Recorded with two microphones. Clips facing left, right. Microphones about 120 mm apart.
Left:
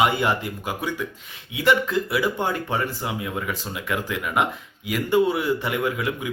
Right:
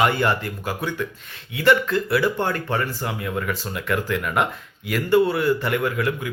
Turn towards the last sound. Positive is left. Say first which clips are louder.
# right 2 dB
turn(degrees=15)  # may be behind; listen again after turning